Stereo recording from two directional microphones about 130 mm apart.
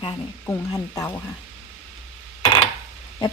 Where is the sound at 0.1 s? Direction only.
25° left (ahead or behind).